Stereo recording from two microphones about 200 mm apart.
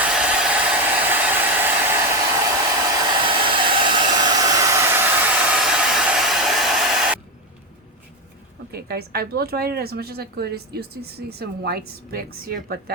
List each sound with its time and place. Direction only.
0.0 s hair dryer: 5° right (ahead or behind)
8.7 s a woman's voice: 50° right (ahead or behind)